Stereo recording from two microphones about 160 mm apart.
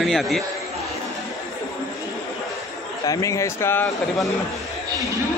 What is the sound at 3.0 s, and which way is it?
Speech, 20° left (ahead or behind).